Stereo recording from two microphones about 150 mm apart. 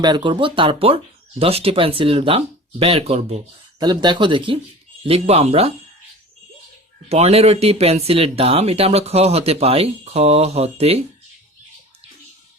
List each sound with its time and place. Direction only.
0.0 s speech: 30° right (ahead or behind)
3.8 s speech: 30° right (ahead or behind)
7.1 s speech: 45° right (ahead or behind)